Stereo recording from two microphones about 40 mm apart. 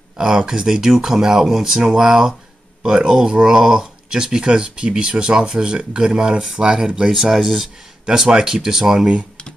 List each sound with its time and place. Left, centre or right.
0.2 s speech: centre
8.6 s speech: centre